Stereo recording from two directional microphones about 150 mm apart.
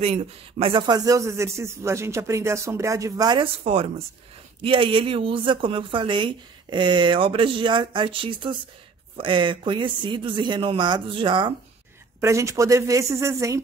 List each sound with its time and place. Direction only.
0.0 s speech: 40° right (ahead or behind)
3.6 s a woman's voice: 45° right (ahead or behind)
12.2 s speech: 20° right (ahead or behind)